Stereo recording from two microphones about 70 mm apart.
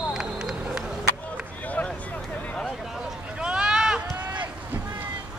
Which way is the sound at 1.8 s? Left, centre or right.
Centre.